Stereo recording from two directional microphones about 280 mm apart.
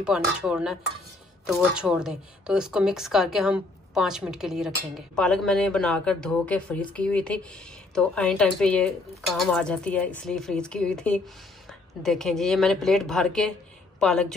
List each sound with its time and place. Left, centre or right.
0.0 s a woman's voice: centre